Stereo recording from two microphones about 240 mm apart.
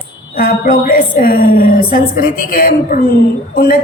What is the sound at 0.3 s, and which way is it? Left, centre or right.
A woman's voice, left.